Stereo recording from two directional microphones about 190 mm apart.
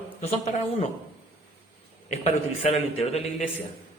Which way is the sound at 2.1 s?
35° left (ahead or behind).